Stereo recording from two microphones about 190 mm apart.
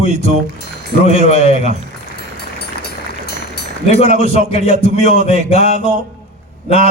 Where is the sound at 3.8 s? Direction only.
35° left (ahead or behind).